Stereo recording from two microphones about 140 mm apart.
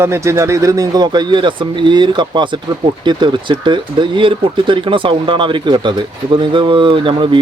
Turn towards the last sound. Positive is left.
turn(degrees=-35)  # may be behind; listen again after turning